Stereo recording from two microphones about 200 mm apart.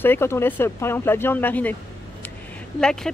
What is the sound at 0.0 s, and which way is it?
Speech, 10° left (ahead or behind).